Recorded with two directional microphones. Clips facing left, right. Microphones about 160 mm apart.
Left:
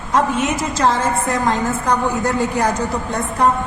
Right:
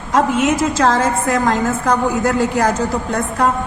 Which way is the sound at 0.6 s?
90° right.